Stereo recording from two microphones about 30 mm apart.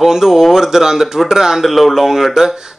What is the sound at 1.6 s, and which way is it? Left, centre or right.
Speech, centre.